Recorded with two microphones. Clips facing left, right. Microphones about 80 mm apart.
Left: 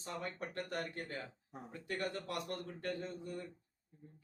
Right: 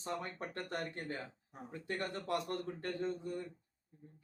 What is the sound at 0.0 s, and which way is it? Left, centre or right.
Speech, right.